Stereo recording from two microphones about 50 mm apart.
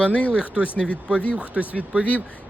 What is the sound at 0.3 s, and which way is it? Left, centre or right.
Speech, right.